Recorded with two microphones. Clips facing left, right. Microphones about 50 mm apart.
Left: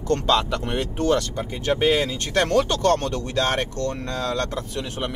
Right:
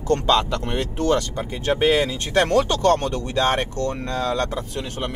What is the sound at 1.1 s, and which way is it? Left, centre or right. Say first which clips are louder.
Speech: right 1 dB; centre.